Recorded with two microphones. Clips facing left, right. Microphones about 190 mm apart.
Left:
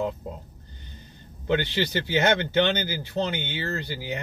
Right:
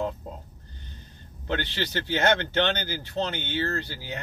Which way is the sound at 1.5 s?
15° left (ahead or behind).